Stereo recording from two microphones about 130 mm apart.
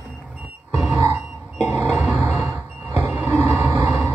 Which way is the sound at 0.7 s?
10° right (ahead or behind).